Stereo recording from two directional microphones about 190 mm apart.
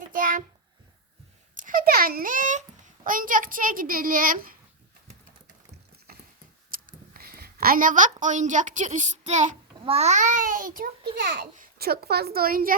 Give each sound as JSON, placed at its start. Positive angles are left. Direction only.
{"t": 0.1, "sound": "a sound", "side_deg": -45}
{"t": 1.5, "sound": "a child's voice", "side_deg": -45}
{"t": 6.7, "sound": "a woman's voice", "side_deg": -45}